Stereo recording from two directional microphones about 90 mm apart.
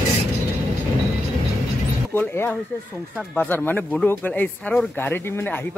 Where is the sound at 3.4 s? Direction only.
20° left (ahead or behind).